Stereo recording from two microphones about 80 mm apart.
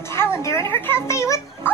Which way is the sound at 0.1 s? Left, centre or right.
Left.